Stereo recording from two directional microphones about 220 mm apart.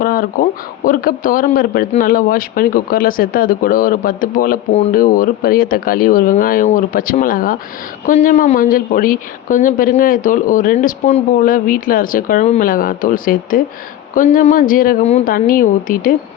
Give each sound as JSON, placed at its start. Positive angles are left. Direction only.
{"t": 0.0, "sound": "speech", "side_deg": 40}